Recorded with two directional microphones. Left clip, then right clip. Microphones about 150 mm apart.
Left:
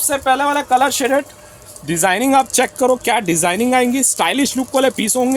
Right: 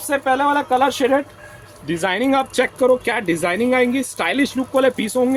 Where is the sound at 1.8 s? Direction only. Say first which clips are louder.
Left 4 dB; 50° left (ahead or behind).